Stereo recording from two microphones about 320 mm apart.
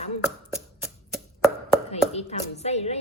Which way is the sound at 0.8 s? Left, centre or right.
Centre.